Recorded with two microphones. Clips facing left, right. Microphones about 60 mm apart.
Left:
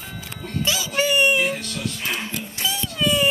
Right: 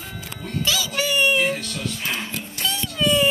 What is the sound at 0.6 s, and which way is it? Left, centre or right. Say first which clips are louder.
Speech: left 2 dB; left.